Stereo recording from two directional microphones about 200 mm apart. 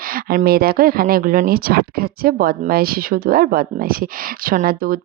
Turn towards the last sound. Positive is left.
turn(degrees=-45)  # may be behind; listen again after turning